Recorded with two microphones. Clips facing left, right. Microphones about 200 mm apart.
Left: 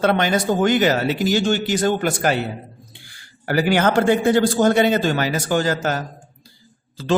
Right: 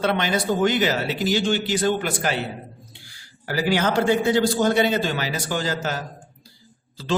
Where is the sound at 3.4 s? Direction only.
55° left (ahead or behind).